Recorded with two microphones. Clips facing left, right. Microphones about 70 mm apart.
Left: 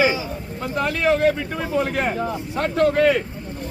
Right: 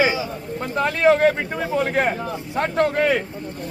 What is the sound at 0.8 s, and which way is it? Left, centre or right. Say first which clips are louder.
Speech: right 3 dB; right.